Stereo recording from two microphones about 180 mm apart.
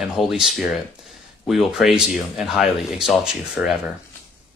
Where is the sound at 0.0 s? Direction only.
Centre (ahead or behind).